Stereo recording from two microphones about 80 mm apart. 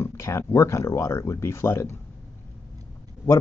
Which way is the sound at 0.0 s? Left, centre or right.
Left.